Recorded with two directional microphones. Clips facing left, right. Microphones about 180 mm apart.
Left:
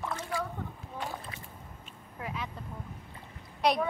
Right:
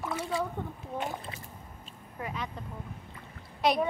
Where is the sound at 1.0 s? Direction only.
20° right (ahead or behind).